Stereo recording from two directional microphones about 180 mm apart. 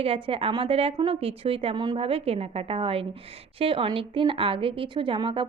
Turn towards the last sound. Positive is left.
turn(degrees=-30)  # may be behind; listen again after turning